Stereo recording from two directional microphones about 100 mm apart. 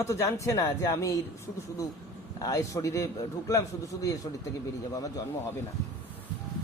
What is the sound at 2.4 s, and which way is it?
A man's voice, 35° left (ahead or behind).